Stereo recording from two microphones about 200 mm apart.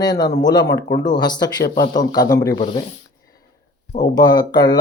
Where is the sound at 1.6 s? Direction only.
45° left (ahead or behind).